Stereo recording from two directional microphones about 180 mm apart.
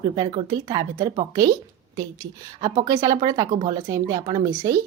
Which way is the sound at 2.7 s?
20° right (ahead or behind).